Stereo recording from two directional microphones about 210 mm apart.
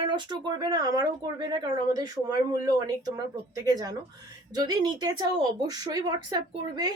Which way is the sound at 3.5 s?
20° right (ahead or behind).